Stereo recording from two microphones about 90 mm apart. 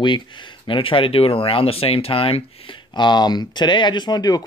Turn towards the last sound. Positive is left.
turn(degrees=50)  # may be behind; listen again after turning